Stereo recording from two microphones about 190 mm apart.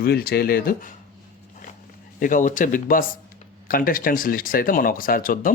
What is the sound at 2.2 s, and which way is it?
Speech, 45° left (ahead or behind).